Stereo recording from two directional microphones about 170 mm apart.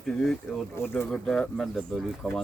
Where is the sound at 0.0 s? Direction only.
Centre (ahead or behind).